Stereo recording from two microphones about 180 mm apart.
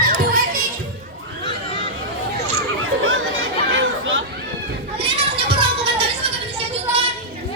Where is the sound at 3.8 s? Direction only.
90° right.